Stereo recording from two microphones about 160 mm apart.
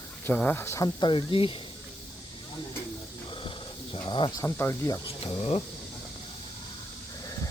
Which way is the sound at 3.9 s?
30° left (ahead or behind).